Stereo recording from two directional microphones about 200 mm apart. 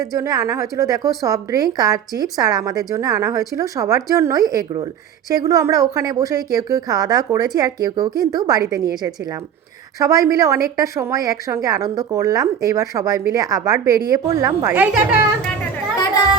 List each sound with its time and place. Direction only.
0.0 s a woman's voice: 15° right (ahead or behind)